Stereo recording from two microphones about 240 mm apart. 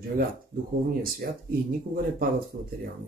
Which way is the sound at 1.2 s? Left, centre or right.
Right.